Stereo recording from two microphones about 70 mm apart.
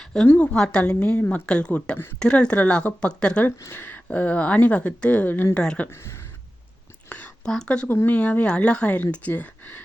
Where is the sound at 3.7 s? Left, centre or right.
Left.